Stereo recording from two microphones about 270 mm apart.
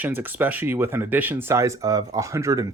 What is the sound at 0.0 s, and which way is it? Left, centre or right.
Speech, centre.